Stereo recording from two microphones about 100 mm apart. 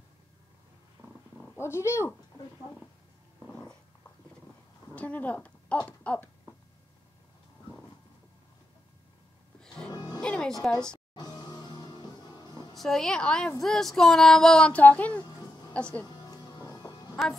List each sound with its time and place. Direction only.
1.0 s purr: 20° right (ahead or behind)
1.6 s speech: 25° left (ahead or behind)
3.4 s cat: 10° left (ahead or behind)
4.9 s speech: 15° left (ahead or behind)
9.8 s music: 45° left (ahead or behind)
10.2 s music: 10° left (ahead or behind)
10.7 s a woman's voice: 10° left (ahead or behind)
11.1 s music: 45° left (ahead or behind)
12.7 s a woman's voice: 5° left (ahead or behind)
16.7 s music: 40° left (ahead or behind)